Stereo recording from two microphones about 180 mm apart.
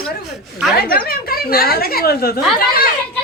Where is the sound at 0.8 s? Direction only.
55° left (ahead or behind).